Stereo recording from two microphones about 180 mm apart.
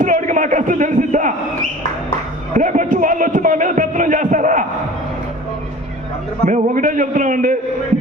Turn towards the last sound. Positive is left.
turn(degrees=-45)  # may be behind; listen again after turning